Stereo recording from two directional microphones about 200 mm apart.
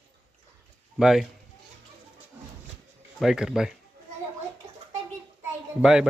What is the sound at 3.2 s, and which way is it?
Speech, centre (ahead or behind).